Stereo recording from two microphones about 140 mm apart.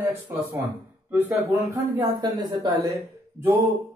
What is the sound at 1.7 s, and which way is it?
A woman's voice, 20° right (ahead or behind).